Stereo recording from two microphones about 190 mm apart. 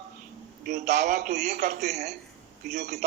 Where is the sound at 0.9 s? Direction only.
40° right (ahead or behind).